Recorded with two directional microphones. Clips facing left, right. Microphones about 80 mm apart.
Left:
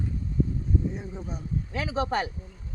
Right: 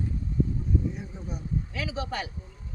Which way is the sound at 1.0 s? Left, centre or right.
Left.